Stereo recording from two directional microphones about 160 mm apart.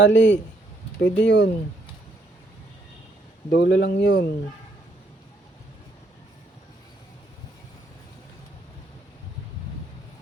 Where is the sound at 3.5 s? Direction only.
85° left.